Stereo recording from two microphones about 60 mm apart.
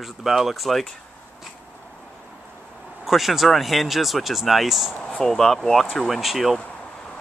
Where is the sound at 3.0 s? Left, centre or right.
Centre.